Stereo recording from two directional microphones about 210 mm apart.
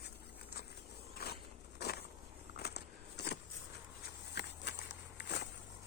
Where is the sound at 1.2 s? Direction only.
50° left (ahead or behind).